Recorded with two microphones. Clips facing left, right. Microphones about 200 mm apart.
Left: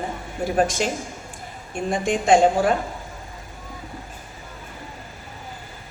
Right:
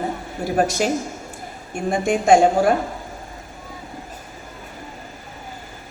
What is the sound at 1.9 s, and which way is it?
Speech, 45° right (ahead or behind).